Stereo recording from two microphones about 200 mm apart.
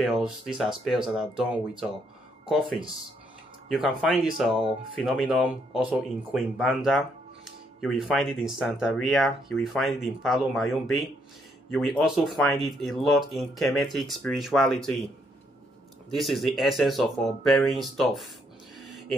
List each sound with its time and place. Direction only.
0.6 s speech: centre (ahead or behind)
3.6 s speech: centre (ahead or behind)
4.6 s speech: 25° right (ahead or behind)
5.0 s speech: centre (ahead or behind)
16.1 s speech: centre (ahead or behind)